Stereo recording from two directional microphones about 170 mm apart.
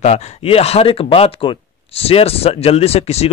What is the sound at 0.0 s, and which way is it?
Speech, 40° left (ahead or behind).